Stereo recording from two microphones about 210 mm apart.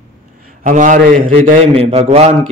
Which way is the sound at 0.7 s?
35° right (ahead or behind).